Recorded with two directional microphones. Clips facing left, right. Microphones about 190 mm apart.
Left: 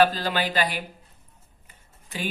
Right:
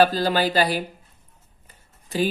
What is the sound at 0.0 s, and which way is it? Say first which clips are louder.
Speech: right 3 dB; 40° right (ahead or behind).